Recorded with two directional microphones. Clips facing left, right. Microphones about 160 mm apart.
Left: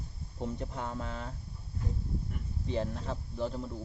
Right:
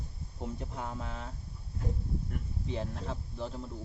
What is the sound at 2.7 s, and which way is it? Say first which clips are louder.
Speech: left 3 dB; centre (ahead or behind).